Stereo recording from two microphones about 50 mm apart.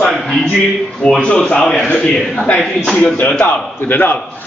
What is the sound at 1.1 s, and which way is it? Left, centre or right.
A man's voice, centre.